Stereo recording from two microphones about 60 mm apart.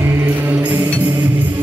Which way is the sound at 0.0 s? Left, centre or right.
Right.